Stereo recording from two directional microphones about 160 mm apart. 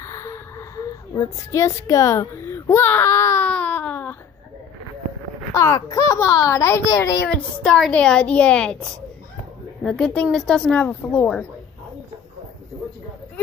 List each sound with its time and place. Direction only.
0.0 s a sound: 20° left (ahead or behind)
5.5 s a child's voice: 20° left (ahead or behind)
7.2 s a woman's voice: 5° left (ahead or behind)
9.8 s a woman's voice: 5° left (ahead or behind)